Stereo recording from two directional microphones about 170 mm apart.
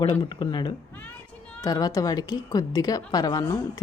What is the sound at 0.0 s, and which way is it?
A woman's voice, 30° left (ahead or behind).